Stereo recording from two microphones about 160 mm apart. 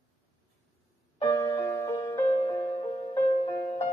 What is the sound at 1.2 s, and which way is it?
Music, 15° left (ahead or behind).